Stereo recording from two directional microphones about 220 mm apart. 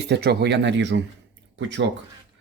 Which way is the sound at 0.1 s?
50° right (ahead or behind).